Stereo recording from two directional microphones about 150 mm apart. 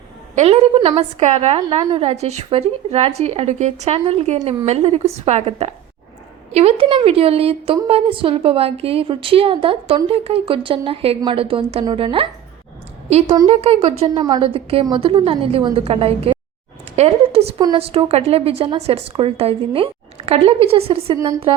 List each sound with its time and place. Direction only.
0.3 s a woman's voice: 40° right (ahead or behind)
13.5 s a woman's voice: 45° right (ahead or behind)
14.1 s a woman's voice: 30° right (ahead or behind)
21.2 s a woman's voice: 20° right (ahead or behind)